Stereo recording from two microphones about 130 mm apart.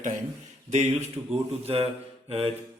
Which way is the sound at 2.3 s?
45° right (ahead or behind).